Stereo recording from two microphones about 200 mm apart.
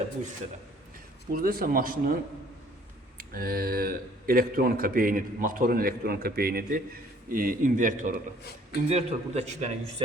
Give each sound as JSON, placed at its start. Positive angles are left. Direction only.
{"t": 1.3, "sound": "speech", "side_deg": -45}
{"t": 3.2, "sound": "a man's voice", "side_deg": -50}